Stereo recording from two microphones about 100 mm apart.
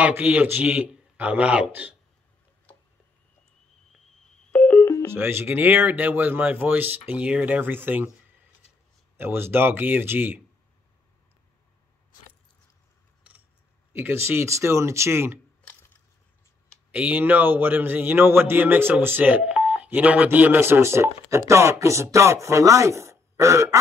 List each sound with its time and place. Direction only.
0.1 s a man's voice: 15° right (ahead or behind)
4.5 s music: 15° left (ahead or behind)
5.1 s a man's voice: 25° right (ahead or behind)
9.1 s a man's voice: 20° right (ahead or behind)
13.9 s a man's voice: 25° right (ahead or behind)
16.9 s a man's voice: 15° right (ahead or behind)